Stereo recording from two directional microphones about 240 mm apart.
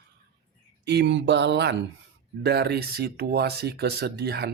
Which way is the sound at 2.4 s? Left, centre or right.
Right.